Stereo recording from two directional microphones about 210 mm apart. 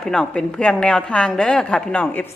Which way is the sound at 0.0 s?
5° left (ahead or behind).